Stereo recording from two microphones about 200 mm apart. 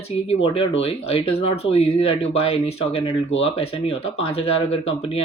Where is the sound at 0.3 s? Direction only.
30° left (ahead or behind).